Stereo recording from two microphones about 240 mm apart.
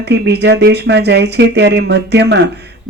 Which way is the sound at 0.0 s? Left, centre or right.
Right.